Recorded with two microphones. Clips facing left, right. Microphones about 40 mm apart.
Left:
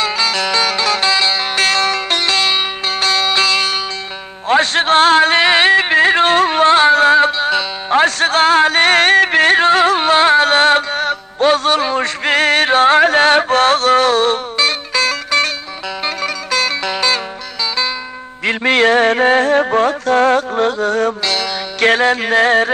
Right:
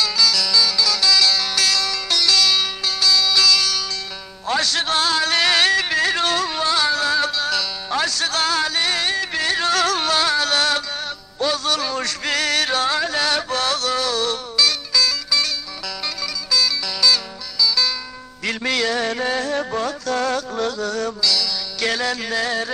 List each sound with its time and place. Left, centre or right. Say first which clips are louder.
0.0 s music: left 3 dB; left
4.5 s a sound: left 8 dB; left
16.2 s music: left 3 dB; left